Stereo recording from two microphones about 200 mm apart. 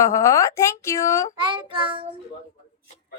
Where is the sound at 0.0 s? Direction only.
15° left (ahead or behind).